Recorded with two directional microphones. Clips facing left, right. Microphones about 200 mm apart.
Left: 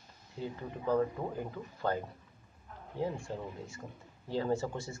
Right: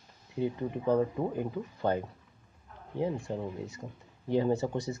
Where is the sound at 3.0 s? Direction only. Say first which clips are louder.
Right 4 dB; 20° right (ahead or behind).